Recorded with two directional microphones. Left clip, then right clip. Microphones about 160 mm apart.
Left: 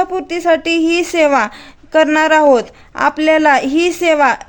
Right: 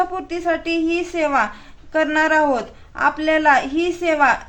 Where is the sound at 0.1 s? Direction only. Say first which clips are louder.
Left 8 dB; 55° left (ahead or behind).